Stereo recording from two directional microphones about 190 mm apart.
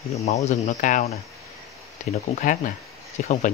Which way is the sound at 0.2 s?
40° left (ahead or behind).